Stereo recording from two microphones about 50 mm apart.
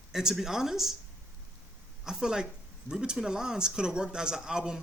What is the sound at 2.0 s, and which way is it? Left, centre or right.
Speech, centre.